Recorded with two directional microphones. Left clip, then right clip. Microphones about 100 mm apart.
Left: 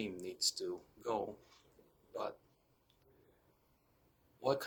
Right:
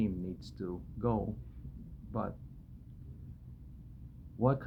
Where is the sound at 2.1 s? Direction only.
25° left (ahead or behind).